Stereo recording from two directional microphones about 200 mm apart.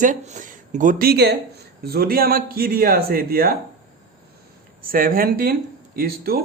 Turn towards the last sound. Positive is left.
turn(degrees=-50)  # may be behind; listen again after turning